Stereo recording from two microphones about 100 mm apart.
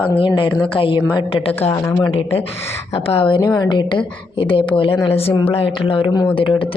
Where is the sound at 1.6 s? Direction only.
20° left (ahead or behind).